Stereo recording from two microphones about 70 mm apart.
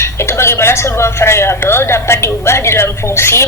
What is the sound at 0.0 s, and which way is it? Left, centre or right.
A woman's voice, left.